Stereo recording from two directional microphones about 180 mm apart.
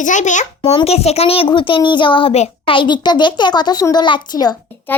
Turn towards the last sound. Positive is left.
turn(degrees=10)  # may be behind; listen again after turning